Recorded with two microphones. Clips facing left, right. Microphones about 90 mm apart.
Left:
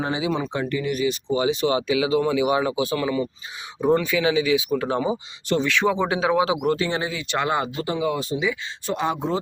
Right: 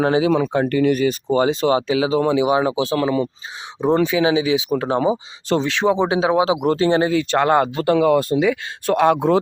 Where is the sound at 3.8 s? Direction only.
25° right (ahead or behind).